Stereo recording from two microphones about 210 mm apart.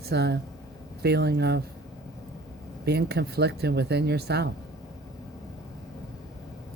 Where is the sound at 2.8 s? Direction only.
50° right (ahead or behind).